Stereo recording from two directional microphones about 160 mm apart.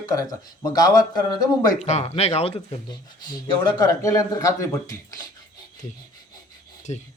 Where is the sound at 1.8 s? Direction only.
45° left (ahead or behind).